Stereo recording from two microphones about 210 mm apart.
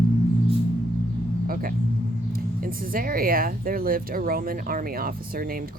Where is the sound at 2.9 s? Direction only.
45° right (ahead or behind).